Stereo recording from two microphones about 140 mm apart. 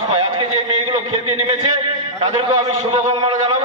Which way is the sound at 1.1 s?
45° right (ahead or behind).